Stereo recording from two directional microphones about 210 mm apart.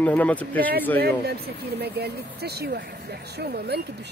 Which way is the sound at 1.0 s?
50° right (ahead or behind).